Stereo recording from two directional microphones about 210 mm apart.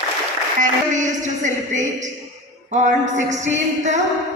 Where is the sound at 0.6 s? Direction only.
35° right (ahead or behind).